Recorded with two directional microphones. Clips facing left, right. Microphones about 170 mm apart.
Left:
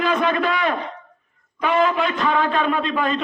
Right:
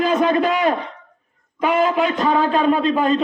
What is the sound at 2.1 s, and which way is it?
A man's voice, 40° right (ahead or behind).